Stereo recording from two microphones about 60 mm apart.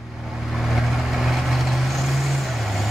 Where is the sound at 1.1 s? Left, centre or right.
Centre.